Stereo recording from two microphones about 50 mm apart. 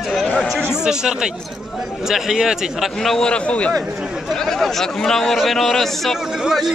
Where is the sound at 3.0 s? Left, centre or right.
Centre.